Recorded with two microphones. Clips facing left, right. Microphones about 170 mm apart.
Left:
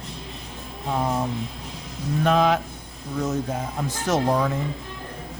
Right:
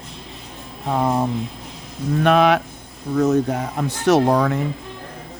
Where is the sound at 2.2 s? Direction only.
70° right (ahead or behind).